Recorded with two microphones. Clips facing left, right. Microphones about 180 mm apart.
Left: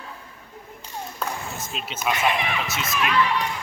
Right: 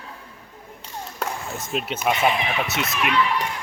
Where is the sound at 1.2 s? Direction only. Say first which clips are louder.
Right 2 dB; 65° right (ahead or behind).